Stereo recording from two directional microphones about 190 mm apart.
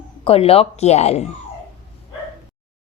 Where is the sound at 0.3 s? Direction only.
30° left (ahead or behind).